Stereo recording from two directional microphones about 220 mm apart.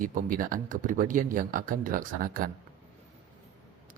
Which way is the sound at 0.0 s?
40° right (ahead or behind).